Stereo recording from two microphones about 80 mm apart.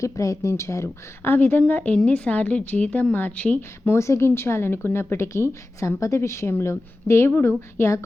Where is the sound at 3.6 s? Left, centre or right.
Left.